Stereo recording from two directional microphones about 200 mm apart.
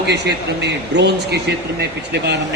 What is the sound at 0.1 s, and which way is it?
Speech, 55° right (ahead or behind).